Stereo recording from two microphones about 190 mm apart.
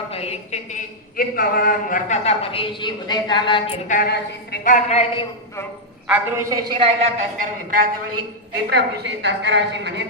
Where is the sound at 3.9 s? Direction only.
55° left (ahead or behind); by 5.2 s 35° left (ahead or behind).